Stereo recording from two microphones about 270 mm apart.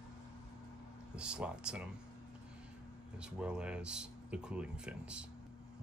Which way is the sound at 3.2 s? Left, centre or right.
Centre.